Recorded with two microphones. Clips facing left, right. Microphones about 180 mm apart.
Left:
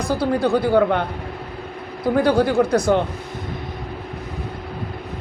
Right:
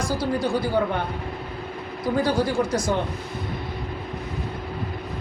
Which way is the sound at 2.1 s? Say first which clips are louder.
Left 6 dB; 60° left (ahead or behind).